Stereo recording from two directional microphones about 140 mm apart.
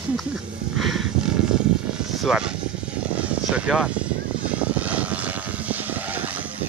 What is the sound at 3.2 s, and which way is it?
Vehicle, 5° right (ahead or behind).